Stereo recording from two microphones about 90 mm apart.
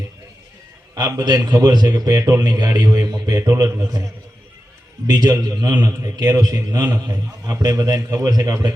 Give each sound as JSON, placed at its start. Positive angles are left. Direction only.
{"t": 0.9, "sound": "a man's voice", "side_deg": -45}
{"t": 2.1, "sound": "a man's voice", "side_deg": -30}
{"t": 2.4, "sound": "a man's voice", "side_deg": -50}
{"t": 5.0, "sound": "a man's voice", "side_deg": -45}